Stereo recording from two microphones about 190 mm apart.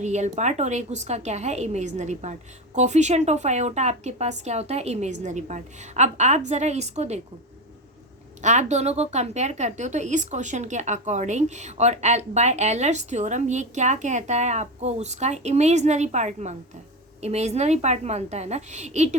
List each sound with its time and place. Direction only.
0.0 s speech: 40° right (ahead or behind)
8.4 s speech: 40° right (ahead or behind)